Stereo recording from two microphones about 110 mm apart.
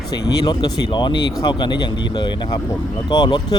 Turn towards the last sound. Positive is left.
turn(degrees=40)  # may be behind; listen again after turning